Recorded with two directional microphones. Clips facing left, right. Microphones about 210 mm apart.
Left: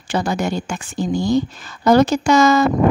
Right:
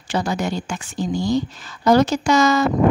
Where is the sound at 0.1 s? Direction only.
55° left (ahead or behind).